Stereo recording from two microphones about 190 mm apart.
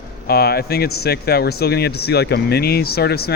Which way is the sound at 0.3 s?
55° left (ahead or behind).